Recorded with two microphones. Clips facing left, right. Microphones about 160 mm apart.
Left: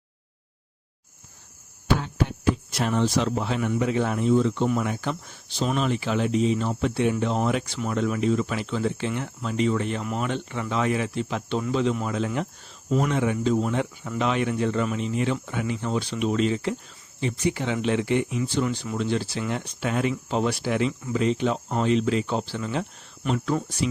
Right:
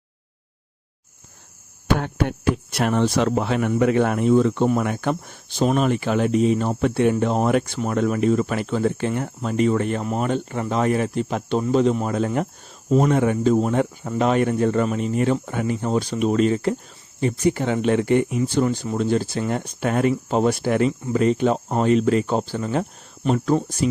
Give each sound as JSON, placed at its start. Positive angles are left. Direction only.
{"t": 2.0, "sound": "speech", "side_deg": -60}